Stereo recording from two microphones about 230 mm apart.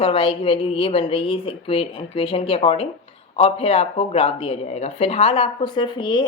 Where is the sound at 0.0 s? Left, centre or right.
Left.